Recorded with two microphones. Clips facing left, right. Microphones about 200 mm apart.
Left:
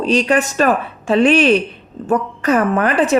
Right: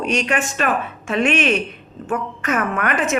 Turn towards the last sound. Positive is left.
turn(degrees=30)  # may be behind; listen again after turning